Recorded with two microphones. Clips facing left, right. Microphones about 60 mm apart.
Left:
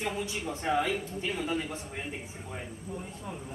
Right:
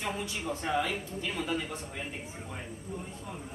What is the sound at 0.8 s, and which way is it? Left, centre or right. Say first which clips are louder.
Speech: left 2 dB; left.